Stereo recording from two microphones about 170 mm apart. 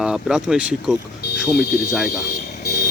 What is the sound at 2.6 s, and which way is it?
Vehicle, 75° left (ahead or behind).